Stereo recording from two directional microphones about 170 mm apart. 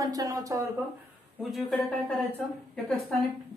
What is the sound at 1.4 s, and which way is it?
Speech, centre (ahead or behind).